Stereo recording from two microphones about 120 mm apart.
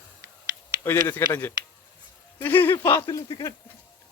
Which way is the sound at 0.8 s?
20° left (ahead or behind).